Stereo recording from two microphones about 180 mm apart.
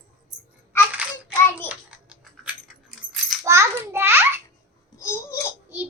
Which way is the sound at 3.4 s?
15° right (ahead or behind).